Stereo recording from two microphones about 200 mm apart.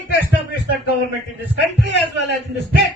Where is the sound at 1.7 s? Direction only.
55° left (ahead or behind).